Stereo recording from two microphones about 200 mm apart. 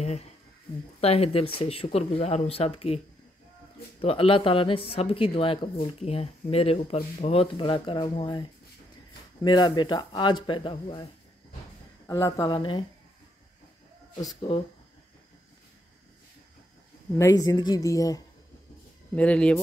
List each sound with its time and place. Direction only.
1.0 s speech: 30° left (ahead or behind)
4.0 s speech: 25° left (ahead or behind)
12.1 s speech: 15° left (ahead or behind)
14.1 s speech: 25° left (ahead or behind)
17.2 s speech: 15° left (ahead or behind)
19.1 s speech: 5° left (ahead or behind)